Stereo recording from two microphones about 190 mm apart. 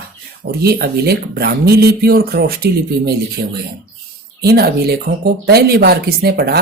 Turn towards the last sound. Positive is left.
turn(degrees=-55)  # may be behind; listen again after turning